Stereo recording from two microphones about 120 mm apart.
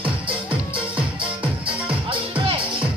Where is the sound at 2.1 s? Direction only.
50° right (ahead or behind).